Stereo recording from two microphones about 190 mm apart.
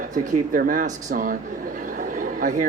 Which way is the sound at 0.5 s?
45° right (ahead or behind).